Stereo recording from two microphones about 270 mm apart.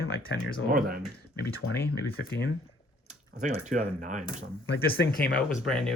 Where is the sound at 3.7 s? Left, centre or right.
Right.